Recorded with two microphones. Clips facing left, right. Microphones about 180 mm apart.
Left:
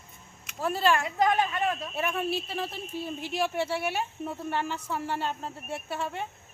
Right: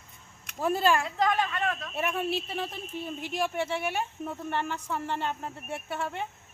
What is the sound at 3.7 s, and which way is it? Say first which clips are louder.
Speech: left 1 dB; 5° left (ahead or behind).